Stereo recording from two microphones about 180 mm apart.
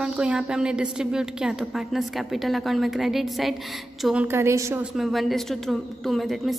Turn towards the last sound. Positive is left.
turn(degrees=0)  # may be behind; listen again after turning